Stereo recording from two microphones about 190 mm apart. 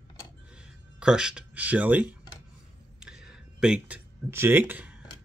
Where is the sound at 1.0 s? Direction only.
5° right (ahead or behind).